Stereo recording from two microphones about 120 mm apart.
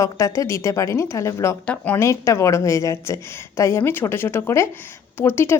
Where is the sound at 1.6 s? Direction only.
10° left (ahead or behind).